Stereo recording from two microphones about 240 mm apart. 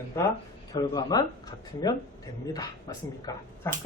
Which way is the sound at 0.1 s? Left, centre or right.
Centre.